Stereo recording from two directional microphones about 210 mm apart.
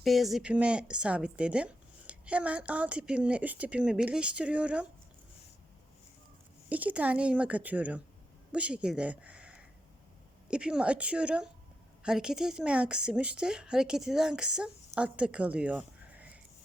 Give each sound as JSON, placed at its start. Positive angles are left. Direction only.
{"t": 0.0, "sound": "speech", "side_deg": 0}
{"t": 6.7, "sound": "a woman's voice", "side_deg": -5}
{"t": 14.8, "sound": "a sound", "side_deg": -5}